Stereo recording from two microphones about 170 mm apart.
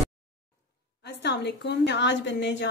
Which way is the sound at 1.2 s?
80° left.